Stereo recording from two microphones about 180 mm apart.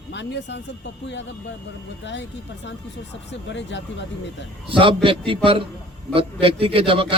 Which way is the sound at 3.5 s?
80° left.